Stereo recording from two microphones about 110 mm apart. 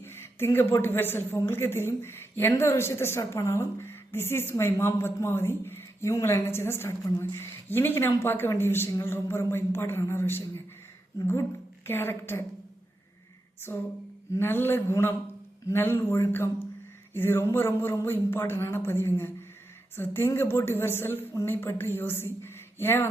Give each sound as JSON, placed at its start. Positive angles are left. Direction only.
{"t": 0.0, "sound": "a sound", "side_deg": 20}
{"t": 0.7, "sound": "a woman's voice", "side_deg": 20}
{"t": 11.9, "sound": "a woman's voice", "side_deg": 20}
{"t": 13.7, "sound": "a woman's voice", "side_deg": 30}